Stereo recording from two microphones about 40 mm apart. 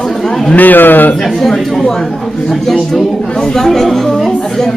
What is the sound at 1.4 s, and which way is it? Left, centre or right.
Speech, centre.